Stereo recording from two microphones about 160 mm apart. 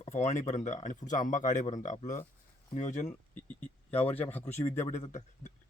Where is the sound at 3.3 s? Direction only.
10° left (ahead or behind).